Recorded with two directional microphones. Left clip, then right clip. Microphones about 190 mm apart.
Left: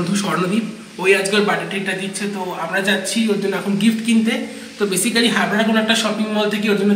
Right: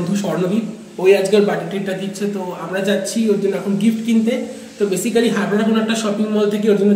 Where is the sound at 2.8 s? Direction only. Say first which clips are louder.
Even; centre (ahead or behind).